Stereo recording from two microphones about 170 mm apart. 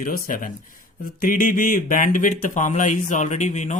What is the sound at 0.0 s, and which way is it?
Speech, 55° left (ahead or behind).